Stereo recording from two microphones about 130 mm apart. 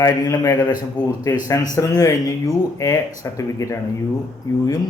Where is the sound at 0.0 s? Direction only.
25° left (ahead or behind).